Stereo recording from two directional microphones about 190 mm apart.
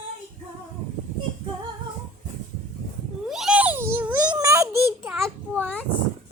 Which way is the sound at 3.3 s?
5° right (ahead or behind).